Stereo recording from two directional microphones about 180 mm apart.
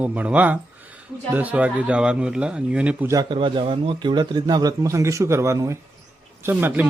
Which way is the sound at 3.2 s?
25° right (ahead or behind).